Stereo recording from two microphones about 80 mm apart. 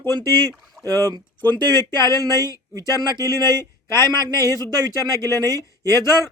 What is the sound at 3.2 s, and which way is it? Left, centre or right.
Speech, right.